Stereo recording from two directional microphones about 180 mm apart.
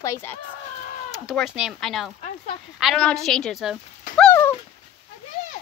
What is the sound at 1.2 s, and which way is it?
Speech, centre (ahead or behind).